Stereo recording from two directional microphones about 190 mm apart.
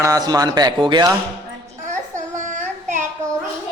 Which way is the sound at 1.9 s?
40° right (ahead or behind).